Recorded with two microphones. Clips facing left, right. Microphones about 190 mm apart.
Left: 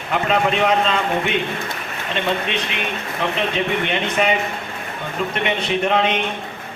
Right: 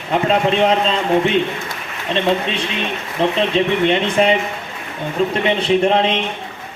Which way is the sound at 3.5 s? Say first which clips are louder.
Right 6 dB; 30° right (ahead or behind).